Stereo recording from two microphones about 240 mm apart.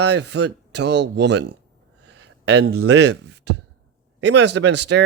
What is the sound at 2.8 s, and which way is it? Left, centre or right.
Speech, right.